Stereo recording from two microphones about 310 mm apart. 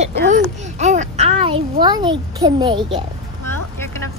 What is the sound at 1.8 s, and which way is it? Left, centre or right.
A child's voice, centre.